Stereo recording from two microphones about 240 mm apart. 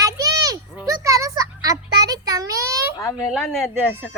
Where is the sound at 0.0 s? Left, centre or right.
Centre.